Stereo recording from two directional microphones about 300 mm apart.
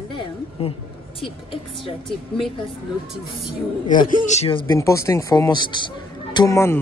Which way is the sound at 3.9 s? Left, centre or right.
Left.